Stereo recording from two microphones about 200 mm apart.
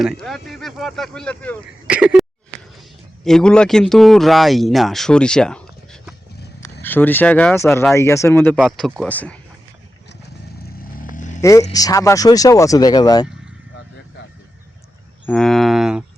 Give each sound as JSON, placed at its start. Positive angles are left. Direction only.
{"t": 0.0, "sound": "speech", "side_deg": 0}
{"t": 2.2, "sound": "a sound", "side_deg": 0}
{"t": 3.2, "sound": "speech", "side_deg": 5}
{"t": 10.1, "sound": "vehicle", "side_deg": 55}
{"t": 11.1, "sound": "vehicle", "side_deg": 40}
{"t": 11.3, "sound": "speech", "side_deg": 15}
{"t": 15.3, "sound": "speech", "side_deg": 0}